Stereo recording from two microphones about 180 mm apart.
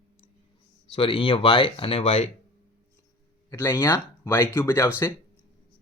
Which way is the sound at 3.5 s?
15° left (ahead or behind).